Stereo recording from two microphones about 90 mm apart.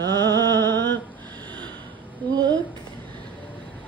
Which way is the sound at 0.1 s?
55° right (ahead or behind).